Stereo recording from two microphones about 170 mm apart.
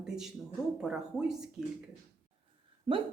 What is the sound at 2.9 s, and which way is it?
Speech, 30° right (ahead or behind).